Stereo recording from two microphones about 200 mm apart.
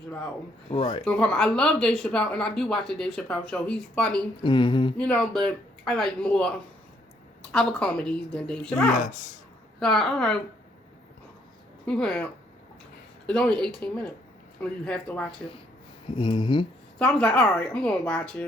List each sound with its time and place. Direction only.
0.7 s humming: 25° left (ahead or behind)
1.0 s speech: 5° left (ahead or behind)
4.4 s humming: 25° left (ahead or behind)
4.9 s speech: 5° left (ahead or behind)
7.5 s speech: 5° left (ahead or behind)
8.9 s speech: 40° left (ahead or behind)
9.8 s speech: centre (ahead or behind)
11.9 s speech: 5° left (ahead or behind)
16.1 s humming: 25° left (ahead or behind)
17.0 s speech: 5° left (ahead or behind)